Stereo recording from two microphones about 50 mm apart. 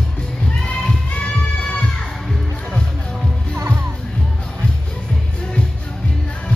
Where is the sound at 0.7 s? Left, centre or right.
Left.